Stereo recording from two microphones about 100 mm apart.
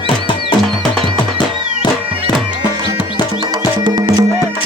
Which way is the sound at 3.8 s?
50° right (ahead or behind).